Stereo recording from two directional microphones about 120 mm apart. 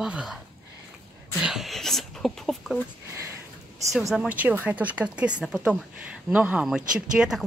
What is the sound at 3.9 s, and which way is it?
Speech, centre (ahead or behind).